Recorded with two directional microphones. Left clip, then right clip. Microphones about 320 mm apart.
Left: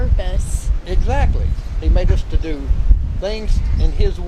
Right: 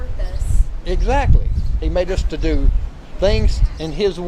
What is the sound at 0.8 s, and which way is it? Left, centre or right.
Speech, right.